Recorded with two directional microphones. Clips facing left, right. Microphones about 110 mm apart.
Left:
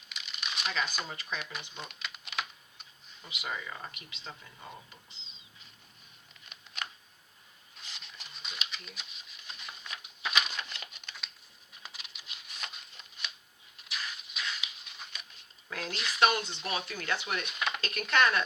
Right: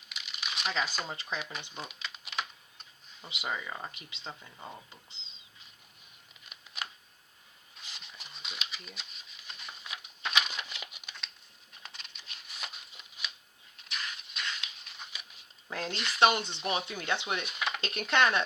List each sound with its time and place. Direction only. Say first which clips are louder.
0.1 s crumpling: even; 5° right (ahead or behind)
0.6 s speech: right 1 dB; 30° right (ahead or behind)
1.7 s typing: right 1 dB; 5° right (ahead or behind)
3.2 s speech: right 2 dB; 30° right (ahead or behind)
6.5 s camera: even; 5° right (ahead or behind)
7.9 s a sound: right 1 dB; 5° right (ahead or behind)
11.8 s a sound: even; 5° left (ahead or behind)
15.7 s speech: right 2 dB; 30° right (ahead or behind)
16.0 s speech: right 1 dB; centre (ahead or behind)
16.2 s speech: right 2 dB; 25° right (ahead or behind)
17.4 s speech: even; centre (ahead or behind)
17.7 s speech: right 1 dB; 25° right (ahead or behind)